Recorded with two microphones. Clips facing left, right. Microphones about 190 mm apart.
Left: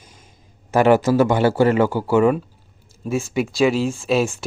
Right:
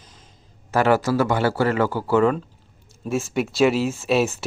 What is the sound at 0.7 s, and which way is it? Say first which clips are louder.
A man's voice: left 4 dB; 20° left (ahead or behind).